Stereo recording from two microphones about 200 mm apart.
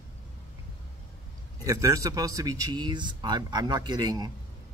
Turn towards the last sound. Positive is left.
turn(degrees=-20)  # may be behind; listen again after turning